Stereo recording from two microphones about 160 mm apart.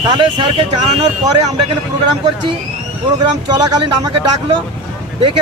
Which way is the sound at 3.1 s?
25° right (ahead or behind).